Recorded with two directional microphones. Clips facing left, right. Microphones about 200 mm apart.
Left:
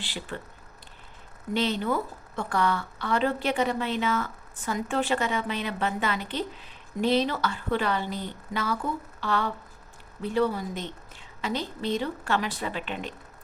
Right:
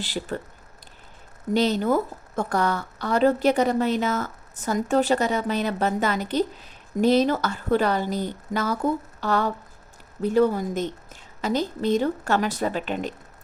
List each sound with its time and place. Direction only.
0.0 s a woman's voice: 40° right (ahead or behind)
1.5 s a woman's voice: 40° right (ahead or behind)